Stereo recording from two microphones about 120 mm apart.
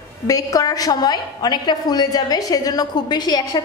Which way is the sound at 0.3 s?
30° left (ahead or behind).